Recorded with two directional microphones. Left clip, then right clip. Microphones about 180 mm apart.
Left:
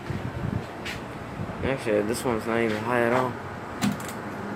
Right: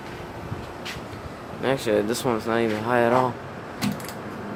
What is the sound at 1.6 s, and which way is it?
Speech, 25° right (ahead or behind).